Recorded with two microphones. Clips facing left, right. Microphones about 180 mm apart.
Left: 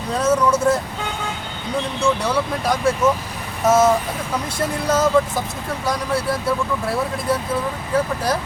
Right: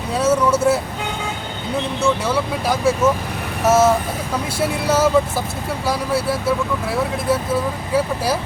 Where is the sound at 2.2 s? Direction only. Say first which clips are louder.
Right 1 dB; 5° right (ahead or behind).